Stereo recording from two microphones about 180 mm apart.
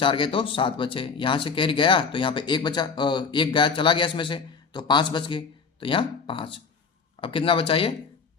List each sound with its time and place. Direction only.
0.0 s speech: 30° left (ahead or behind)